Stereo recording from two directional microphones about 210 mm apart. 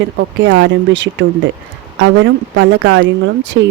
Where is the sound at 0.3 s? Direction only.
60° right (ahead or behind).